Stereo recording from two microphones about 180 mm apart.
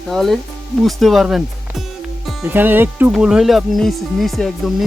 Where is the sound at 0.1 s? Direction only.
Centre (ahead or behind).